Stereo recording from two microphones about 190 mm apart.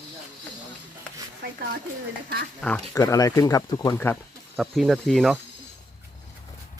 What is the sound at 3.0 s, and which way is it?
Speech, 15° left (ahead or behind).